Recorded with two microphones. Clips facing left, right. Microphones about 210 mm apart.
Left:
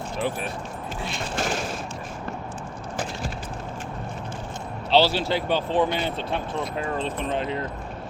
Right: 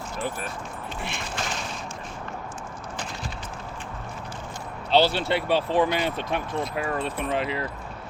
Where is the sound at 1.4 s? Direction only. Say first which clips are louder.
Left 7 dB; 50° left (ahead or behind).